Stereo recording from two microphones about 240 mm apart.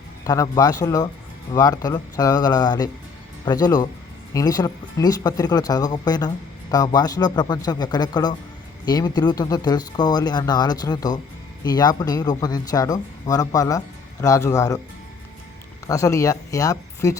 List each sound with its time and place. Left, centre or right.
0.3 s speech: centre
15.9 s speech: centre